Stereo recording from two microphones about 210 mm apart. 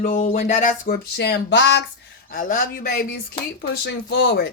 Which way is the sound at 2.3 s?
40° left (ahead or behind).